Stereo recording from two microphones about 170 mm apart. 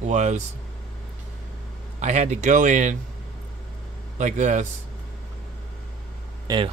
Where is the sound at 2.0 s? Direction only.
45° right (ahead or behind).